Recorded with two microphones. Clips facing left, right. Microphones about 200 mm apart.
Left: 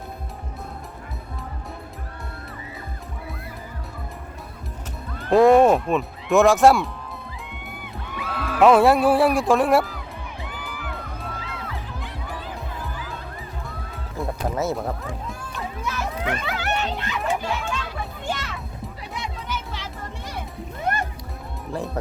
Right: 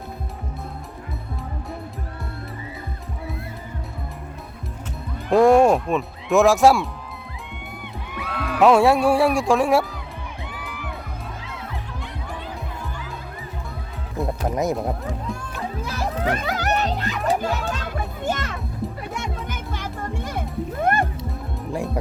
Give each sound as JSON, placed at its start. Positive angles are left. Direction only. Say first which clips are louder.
{"t": 5.3, "sound": "speech", "louder": "even", "side_deg": 0}
{"t": 8.1, "sound": "speech", "louder": "right 1 dB", "side_deg": 0}
{"t": 10.6, "sound": "music", "louder": "even", "side_deg": 0}
{"t": 14.2, "sound": "music", "louder": "right 3 dB", "side_deg": 0}
{"t": 14.5, "sound": "speech", "louder": "right 2 dB", "side_deg": -15}
{"t": 15.8, "sound": "music", "louder": "right 2 dB", "side_deg": -35}
{"t": 17.0, "sound": "children playing", "louder": "right 3 dB", "side_deg": -40}
{"t": 19.1, "sound": "music", "louder": "right 1 dB", "side_deg": -50}